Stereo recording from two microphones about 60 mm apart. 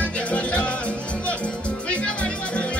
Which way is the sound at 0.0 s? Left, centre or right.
Left.